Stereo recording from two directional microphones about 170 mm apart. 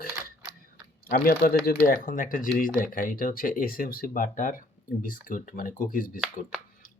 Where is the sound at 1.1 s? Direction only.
60° left (ahead or behind).